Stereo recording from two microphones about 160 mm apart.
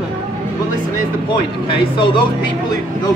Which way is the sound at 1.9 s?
30° left (ahead or behind).